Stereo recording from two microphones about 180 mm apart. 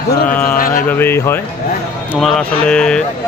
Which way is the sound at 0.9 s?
10° left (ahead or behind).